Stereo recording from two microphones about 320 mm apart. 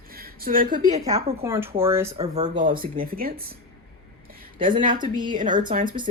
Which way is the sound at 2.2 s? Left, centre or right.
Centre.